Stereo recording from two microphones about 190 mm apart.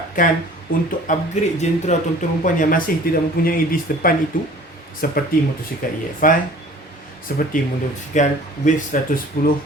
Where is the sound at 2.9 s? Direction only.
50° left (ahead or behind).